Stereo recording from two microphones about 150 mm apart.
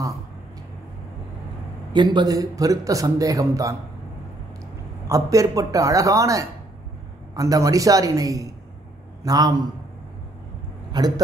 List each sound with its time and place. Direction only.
2.0 s speech: 25° right (ahead or behind)
5.0 s speech: 20° right (ahead or behind)
10.9 s speech: 25° right (ahead or behind)